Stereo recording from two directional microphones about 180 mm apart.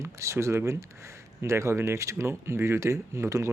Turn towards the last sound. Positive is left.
turn(degrees=-15)  # may be behind; listen again after turning